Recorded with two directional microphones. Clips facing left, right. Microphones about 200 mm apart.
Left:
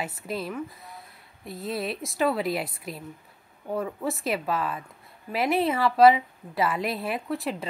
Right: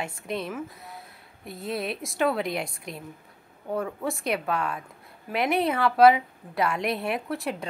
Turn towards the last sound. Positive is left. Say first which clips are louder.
# even
turn(degrees=0)  # may be behind; listen again after turning